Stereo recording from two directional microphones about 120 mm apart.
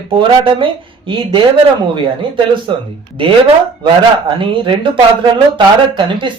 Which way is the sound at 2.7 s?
45° right (ahead or behind).